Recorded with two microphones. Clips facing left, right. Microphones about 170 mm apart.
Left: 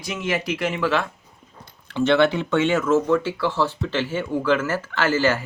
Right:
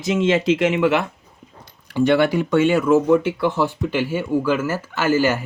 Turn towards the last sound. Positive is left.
turn(degrees=-10)  # may be behind; listen again after turning